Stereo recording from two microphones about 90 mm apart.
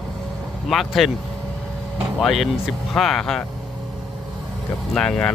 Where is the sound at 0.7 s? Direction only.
Centre (ahead or behind).